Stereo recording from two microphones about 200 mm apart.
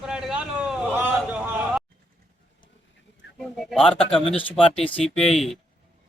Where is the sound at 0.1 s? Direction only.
5° right (ahead or behind).